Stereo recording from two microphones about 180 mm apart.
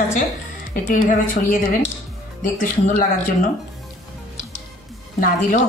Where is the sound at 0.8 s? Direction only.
50° left (ahead or behind).